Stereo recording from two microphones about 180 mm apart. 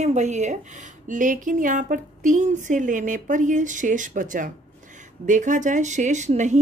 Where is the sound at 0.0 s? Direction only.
40° right (ahead or behind).